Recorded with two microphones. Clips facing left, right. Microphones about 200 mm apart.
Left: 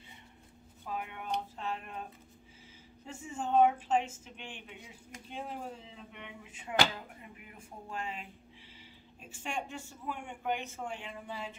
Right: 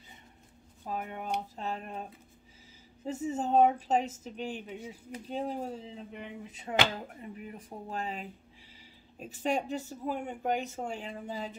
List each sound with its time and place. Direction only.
0.8 s speech: 40° right (ahead or behind)
3.1 s speech: 40° right (ahead or behind)